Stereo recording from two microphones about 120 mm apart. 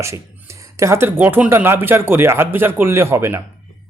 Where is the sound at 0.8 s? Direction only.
20° right (ahead or behind).